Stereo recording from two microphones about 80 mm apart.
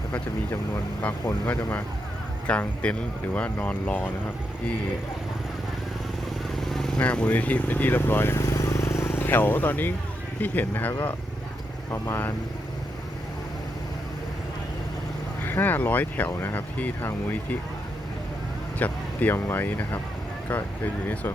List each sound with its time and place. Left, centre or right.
1.0 s speech: left
6.7 s vehicle: centre
7.0 s speech: centre; by 12.3 s left
15.4 s speech: left
18.8 s speech: left